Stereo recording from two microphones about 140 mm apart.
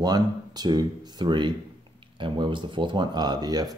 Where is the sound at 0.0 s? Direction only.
30° right (ahead or behind).